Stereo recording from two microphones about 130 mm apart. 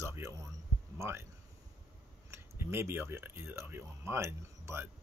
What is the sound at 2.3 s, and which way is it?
Speech, 20° right (ahead or behind).